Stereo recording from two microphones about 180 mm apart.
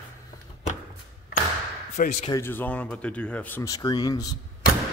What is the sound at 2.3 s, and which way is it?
Speech, 15° left (ahead or behind).